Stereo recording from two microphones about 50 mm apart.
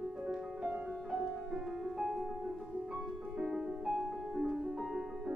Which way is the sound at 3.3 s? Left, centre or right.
Centre.